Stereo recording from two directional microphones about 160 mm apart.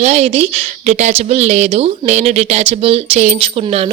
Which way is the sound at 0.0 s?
45° right (ahead or behind).